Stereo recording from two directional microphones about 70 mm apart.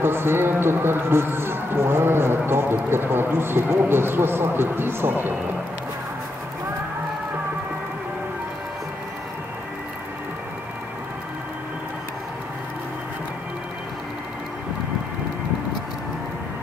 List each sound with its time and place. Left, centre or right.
0.0 s speech: right